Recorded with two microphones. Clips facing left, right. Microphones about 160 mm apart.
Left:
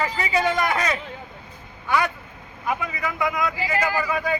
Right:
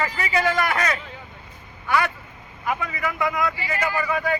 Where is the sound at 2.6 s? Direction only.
15° left (ahead or behind).